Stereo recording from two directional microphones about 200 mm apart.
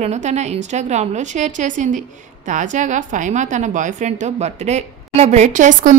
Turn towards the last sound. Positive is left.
turn(degrees=-40)  # may be behind; listen again after turning